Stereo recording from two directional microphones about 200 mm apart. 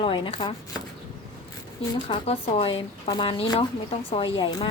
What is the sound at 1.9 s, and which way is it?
Speech, 25° left (ahead or behind).